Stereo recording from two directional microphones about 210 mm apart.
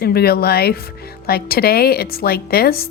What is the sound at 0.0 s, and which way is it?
Speech, 45° left (ahead or behind).